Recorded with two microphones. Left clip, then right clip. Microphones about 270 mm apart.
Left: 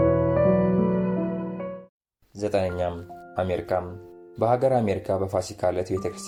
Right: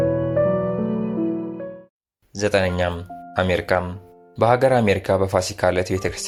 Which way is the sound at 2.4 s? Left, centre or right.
Right.